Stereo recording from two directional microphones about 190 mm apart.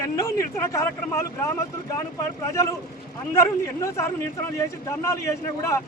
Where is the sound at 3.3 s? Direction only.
15° left (ahead or behind).